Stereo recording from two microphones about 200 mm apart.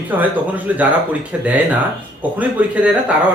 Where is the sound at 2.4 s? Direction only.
5° right (ahead or behind).